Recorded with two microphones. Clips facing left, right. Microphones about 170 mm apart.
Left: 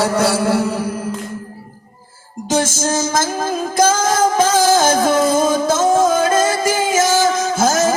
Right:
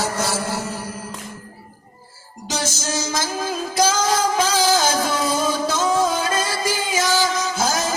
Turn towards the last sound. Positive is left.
turn(degrees=50)  # may be behind; listen again after turning